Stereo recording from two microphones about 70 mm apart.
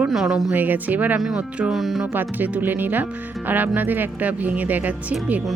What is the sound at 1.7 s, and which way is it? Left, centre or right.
Speech, centre.